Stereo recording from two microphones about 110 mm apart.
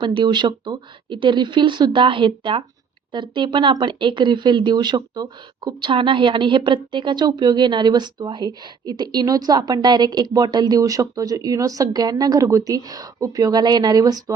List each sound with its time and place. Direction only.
0.0 s speech: 45° right (ahead or behind)